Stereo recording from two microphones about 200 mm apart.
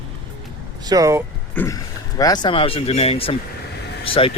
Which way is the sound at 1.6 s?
15° left (ahead or behind).